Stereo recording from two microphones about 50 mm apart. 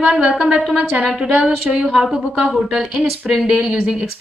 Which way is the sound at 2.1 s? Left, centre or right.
Centre.